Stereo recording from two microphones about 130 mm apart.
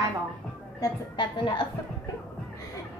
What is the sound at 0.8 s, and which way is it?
Speech, 35° left (ahead or behind).